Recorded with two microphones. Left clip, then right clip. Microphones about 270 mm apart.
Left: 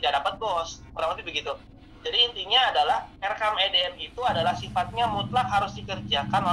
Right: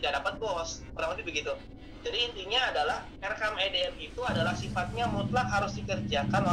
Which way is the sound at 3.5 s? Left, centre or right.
Left.